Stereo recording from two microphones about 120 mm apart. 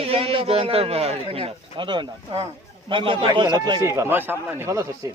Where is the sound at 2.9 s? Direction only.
45° right (ahead or behind).